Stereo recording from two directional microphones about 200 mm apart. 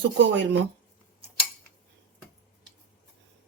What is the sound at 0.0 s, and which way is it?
Speech, 60° right (ahead or behind).